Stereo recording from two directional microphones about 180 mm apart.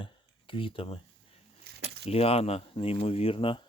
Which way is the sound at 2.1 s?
35° left (ahead or behind).